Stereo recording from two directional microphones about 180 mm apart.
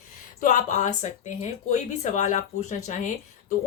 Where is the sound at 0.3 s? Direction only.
45° left (ahead or behind).